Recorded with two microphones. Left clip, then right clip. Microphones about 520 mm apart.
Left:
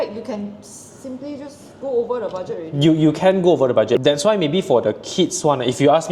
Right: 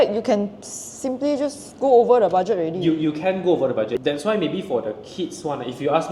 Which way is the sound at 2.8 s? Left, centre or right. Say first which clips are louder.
Left 6 dB; left.